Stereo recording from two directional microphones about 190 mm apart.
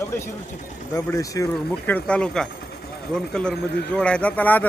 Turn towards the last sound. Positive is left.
turn(degrees=10)  # may be behind; listen again after turning